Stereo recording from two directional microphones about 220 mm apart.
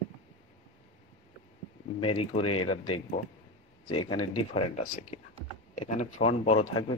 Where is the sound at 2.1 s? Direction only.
25° left (ahead or behind).